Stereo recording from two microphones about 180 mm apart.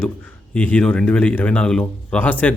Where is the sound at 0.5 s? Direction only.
5° left (ahead or behind).